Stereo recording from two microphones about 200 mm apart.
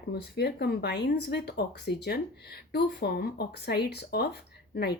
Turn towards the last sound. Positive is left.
turn(degrees=55)  # may be behind; listen again after turning